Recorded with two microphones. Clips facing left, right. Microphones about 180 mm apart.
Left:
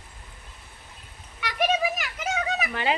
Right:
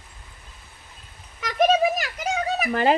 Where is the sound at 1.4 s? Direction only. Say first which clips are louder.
Right 6 dB; 40° right (ahead or behind).